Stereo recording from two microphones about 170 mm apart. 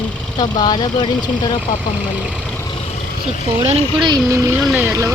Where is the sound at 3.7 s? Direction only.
30° right (ahead or behind).